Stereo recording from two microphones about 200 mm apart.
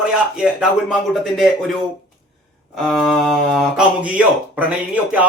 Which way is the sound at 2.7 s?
Centre (ahead or behind).